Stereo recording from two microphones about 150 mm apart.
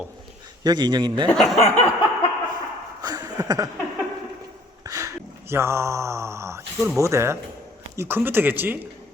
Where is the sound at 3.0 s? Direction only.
25° right (ahead or behind).